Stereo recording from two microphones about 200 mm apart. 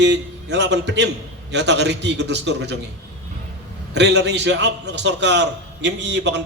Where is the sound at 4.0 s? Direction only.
60° right (ahead or behind).